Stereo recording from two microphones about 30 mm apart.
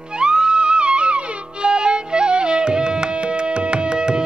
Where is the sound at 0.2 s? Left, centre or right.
Right.